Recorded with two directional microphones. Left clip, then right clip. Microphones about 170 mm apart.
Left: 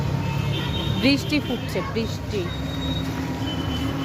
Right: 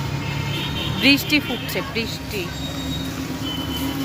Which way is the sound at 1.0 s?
Centre (ahead or behind).